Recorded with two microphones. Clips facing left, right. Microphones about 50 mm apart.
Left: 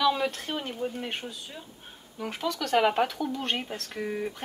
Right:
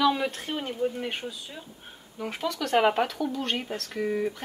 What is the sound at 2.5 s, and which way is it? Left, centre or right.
Speech, right.